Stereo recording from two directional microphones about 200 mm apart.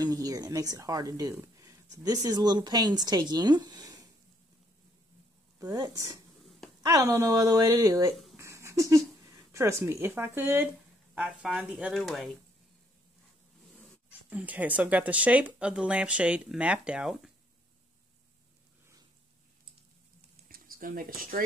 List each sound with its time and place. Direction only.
0.0 s speech: 20° right (ahead or behind)
5.6 s a woman's voice: 15° right (ahead or behind)
8.4 s a sound: 15° right (ahead or behind)
9.5 s a woman's voice: 15° right (ahead or behind)
14.3 s a woman's voice: 5° right (ahead or behind)
20.4 s a sound: 45° right (ahead or behind)